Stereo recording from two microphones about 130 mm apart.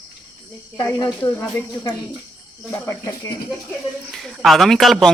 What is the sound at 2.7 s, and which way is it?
Speech, 25° left (ahead or behind).